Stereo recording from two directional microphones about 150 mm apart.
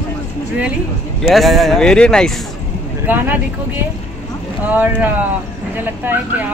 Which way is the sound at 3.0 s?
10° right (ahead or behind).